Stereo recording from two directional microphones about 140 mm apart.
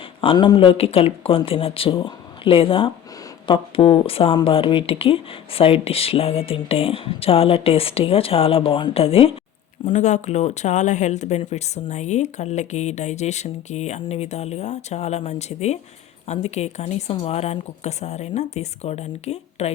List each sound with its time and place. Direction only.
0.2 s speech: 35° left (ahead or behind)
9.9 s speech: 55° left (ahead or behind)